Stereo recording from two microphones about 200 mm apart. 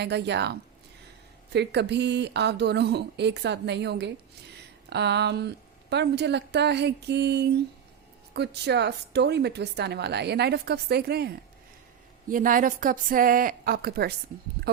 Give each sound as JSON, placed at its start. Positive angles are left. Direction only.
{"t": 0.0, "sound": "speech", "side_deg": -60}
{"t": 1.5, "sound": "a woman's voice", "side_deg": -55}